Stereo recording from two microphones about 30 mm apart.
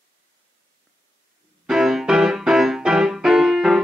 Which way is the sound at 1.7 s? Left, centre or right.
Centre.